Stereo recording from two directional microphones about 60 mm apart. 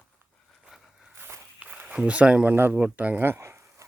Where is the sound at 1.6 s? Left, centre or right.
Centre.